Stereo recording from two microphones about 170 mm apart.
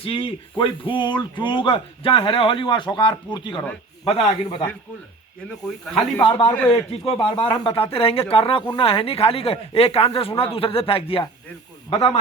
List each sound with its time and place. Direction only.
0.0 s speech: 30° left (ahead or behind)
5.5 s a man's voice: 5° left (ahead or behind)
6.9 s speech: 35° left (ahead or behind)